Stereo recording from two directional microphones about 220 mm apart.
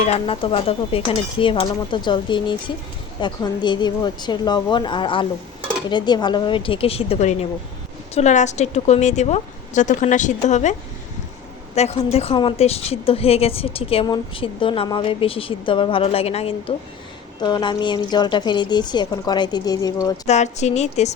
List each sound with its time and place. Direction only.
0.0 s a woman's voice: 25° left (ahead or behind)
20.2 s a woman's voice: 30° left (ahead or behind)